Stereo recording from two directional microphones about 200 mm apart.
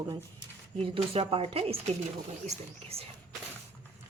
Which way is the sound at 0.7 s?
25° right (ahead or behind).